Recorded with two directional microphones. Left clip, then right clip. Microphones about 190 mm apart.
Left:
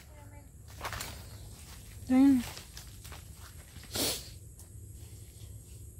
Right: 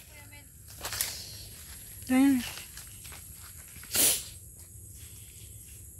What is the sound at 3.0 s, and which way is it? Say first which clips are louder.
Walk: right 2 dB; centre (ahead or behind).